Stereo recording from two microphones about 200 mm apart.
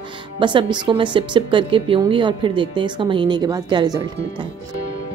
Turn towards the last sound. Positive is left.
turn(degrees=-20)  # may be behind; listen again after turning